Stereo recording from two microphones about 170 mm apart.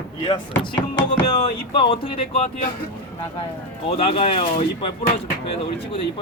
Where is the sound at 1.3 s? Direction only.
30° left (ahead or behind).